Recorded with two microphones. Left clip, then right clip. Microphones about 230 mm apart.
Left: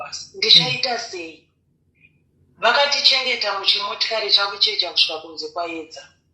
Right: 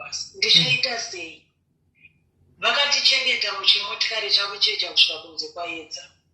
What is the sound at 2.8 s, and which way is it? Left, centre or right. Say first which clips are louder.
Speech: even; left.